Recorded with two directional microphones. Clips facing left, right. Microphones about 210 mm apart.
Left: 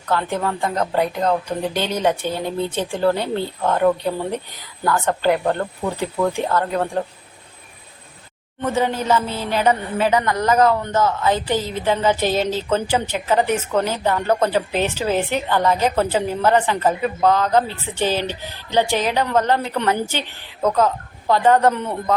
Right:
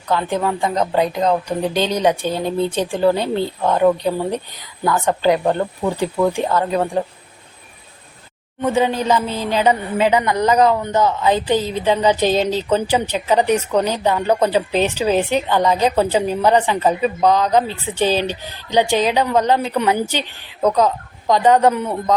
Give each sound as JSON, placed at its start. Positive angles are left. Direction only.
{"t": 0.1, "sound": "a woman's voice", "side_deg": -15}
{"t": 8.6, "sound": "a woman's voice", "side_deg": -15}